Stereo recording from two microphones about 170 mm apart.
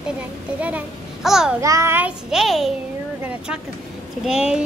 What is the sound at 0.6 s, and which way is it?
A child's voice, 10° right (ahead or behind).